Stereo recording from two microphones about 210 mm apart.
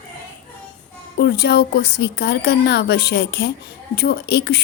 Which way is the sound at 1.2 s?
50° left (ahead or behind).